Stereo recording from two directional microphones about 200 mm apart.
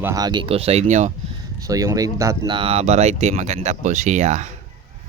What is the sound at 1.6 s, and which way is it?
Speech, 15° right (ahead or behind).